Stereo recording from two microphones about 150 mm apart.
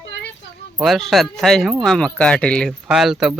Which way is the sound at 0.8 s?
Centre (ahead or behind).